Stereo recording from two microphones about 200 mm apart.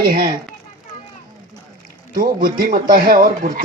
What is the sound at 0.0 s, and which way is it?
Speech, 45° right (ahead or behind).